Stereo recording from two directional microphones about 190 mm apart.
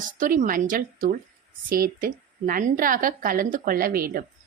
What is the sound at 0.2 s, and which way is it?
A woman's voice, 45° right (ahead or behind).